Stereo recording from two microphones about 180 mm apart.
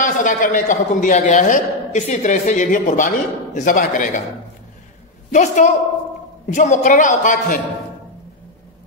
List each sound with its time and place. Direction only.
0.0 s a man's voice: 50° left (ahead or behind)
5.3 s a woman's voice: 40° left (ahead or behind)